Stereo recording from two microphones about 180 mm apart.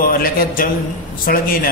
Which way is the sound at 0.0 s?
55° left (ahead or behind).